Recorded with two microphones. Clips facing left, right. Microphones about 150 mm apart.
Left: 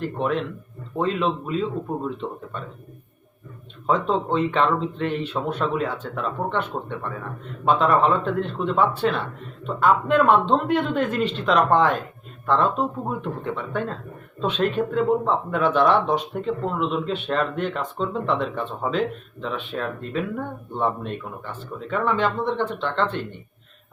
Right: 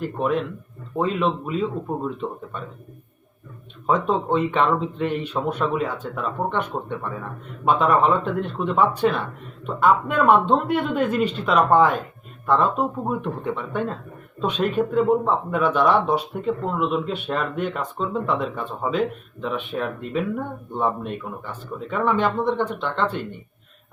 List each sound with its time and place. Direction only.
0.0 s speech: 10° right (ahead or behind)
3.8 s speech: 15° right (ahead or behind)